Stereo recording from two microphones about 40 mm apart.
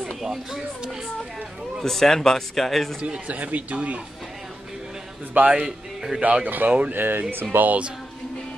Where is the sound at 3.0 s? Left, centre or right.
Right.